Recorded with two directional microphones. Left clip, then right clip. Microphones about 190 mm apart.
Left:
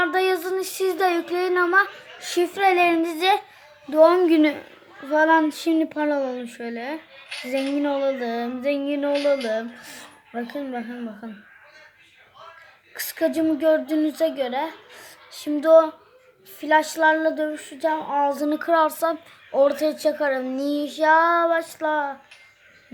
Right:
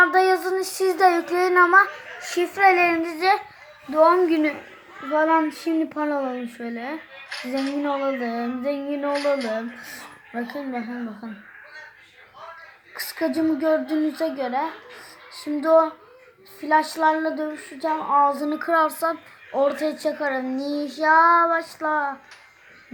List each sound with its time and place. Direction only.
0.0 s child singing: 20° left (ahead or behind)
3.9 s a sound: 35° left (ahead or behind)
5.5 s a woman's voice: 30° left (ahead or behind)
12.9 s a woman's voice: 30° left (ahead or behind)
16.6 s a sound: 30° left (ahead or behind)
20.7 s child singing: 60° left (ahead or behind)
21.0 s a woman's voice: 30° left (ahead or behind)